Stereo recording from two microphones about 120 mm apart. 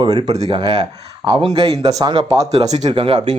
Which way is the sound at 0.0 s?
40° right (ahead or behind).